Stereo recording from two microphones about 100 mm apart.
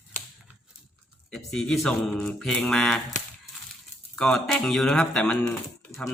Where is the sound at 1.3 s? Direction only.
5° left (ahead or behind).